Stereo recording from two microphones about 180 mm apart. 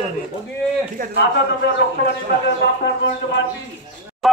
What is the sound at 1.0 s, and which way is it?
Speech, 50° right (ahead or behind).